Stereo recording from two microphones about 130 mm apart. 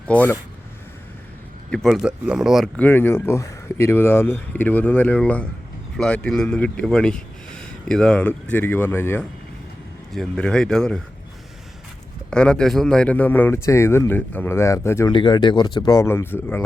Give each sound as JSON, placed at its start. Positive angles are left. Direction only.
{"t": 0.1, "sound": "speech", "side_deg": 15}
{"t": 1.7, "sound": "speech", "side_deg": 0}
{"t": 2.7, "sound": "speech", "side_deg": 15}
{"t": 10.1, "sound": "speech", "side_deg": 5}
{"t": 12.3, "sound": "speech", "side_deg": 5}
{"t": 15.1, "sound": "speech", "side_deg": 35}